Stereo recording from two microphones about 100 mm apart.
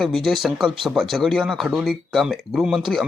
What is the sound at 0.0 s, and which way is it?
A man's voice, 5° left (ahead or behind).